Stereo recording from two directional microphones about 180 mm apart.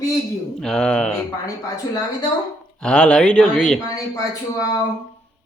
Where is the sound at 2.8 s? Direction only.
5° left (ahead or behind).